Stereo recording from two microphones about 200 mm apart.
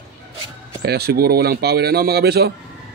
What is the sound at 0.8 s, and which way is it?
Speech, 55° right (ahead or behind).